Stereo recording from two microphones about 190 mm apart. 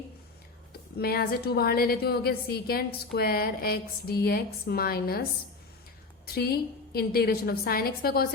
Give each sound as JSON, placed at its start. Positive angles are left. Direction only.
{"t": 0.7, "sound": "a woman's voice", "side_deg": 55}
{"t": 6.2, "sound": "a woman's voice", "side_deg": 55}